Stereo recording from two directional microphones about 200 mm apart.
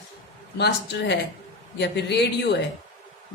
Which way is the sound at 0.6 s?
60° left (ahead or behind).